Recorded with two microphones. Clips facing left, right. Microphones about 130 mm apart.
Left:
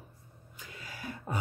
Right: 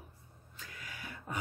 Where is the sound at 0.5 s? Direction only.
25° left (ahead or behind).